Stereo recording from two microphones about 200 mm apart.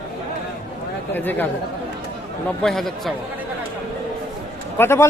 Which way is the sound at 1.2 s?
10° left (ahead or behind).